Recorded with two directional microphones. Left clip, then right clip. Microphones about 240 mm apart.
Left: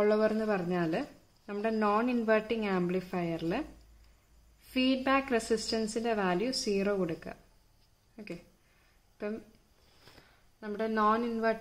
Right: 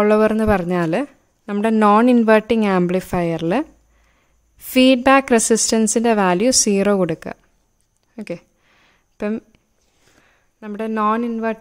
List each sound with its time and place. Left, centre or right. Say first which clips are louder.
0.0 s a woman's voice: right 12 dB; right
4.7 s a woman's voice: right 16 dB; right
8.2 s a sound: right 15 dB; right
10.2 s speech: right 8 dB; right